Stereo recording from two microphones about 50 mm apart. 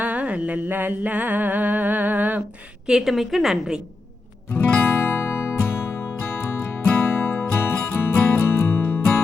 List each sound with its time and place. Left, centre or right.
0.0 s a sound: right
0.7 s a sound: right
3.0 s a woman's voice: centre
4.5 s music: left
7.0 s music: left
7.5 s music: left